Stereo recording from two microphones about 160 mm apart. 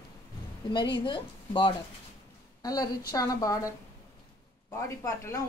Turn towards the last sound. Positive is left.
turn(degrees=20)  # may be behind; listen again after turning